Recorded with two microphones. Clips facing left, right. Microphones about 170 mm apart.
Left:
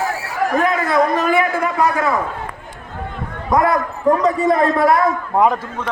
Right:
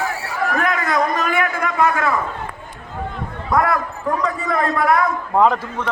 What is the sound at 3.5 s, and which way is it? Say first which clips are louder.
A man's voice: left 3 dB; 20° left (ahead or behind).